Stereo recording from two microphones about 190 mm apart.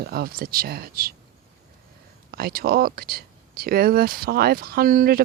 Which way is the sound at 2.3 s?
55° right (ahead or behind).